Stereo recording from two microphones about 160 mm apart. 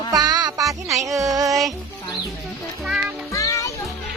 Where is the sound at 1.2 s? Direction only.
20° right (ahead or behind).